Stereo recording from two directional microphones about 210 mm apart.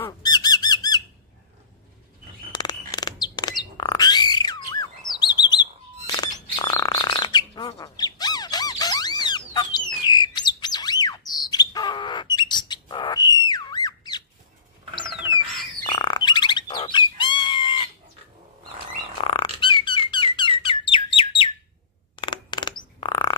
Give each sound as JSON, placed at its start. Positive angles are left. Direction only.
{"t": 0.0, "sound": "squawk", "side_deg": 20}
{"t": 2.5, "sound": "bird", "side_deg": 20}
{"t": 5.2, "sound": "chirp", "side_deg": 20}
{"t": 6.5, "sound": "bird", "side_deg": 15}
{"t": 15.8, "sound": "bird", "side_deg": 20}
{"t": 19.2, "sound": "squeak", "side_deg": 25}
{"t": 20.6, "sound": "bird", "side_deg": 25}
{"t": 22.1, "sound": "a sound", "side_deg": 25}